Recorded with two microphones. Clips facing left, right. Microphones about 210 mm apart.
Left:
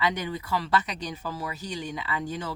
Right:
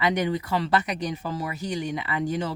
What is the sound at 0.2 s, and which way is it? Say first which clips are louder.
Speech: right 5 dB; 70° right (ahead or behind).